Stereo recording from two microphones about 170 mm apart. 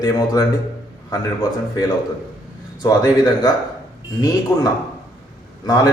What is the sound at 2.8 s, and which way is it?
A man's voice, 25° left (ahead or behind).